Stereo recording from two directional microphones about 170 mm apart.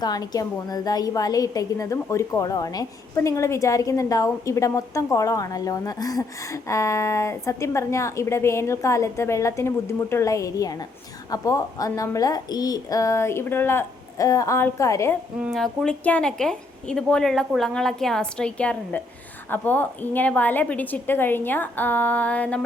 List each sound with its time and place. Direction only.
0.0 s a woman's voice: 20° left (ahead or behind)
15.5 s a woman's voice: 5° left (ahead or behind)